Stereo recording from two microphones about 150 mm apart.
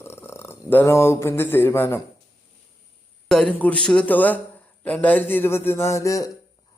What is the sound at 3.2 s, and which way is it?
Speech, 5° left (ahead or behind).